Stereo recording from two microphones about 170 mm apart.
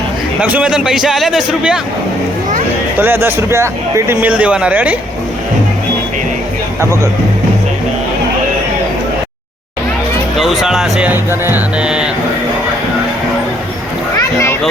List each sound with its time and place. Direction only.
0.4 s speech: 10° right (ahead or behind)
3.0 s speech: 10° right (ahead or behind)
10.3 s speech: centre (ahead or behind)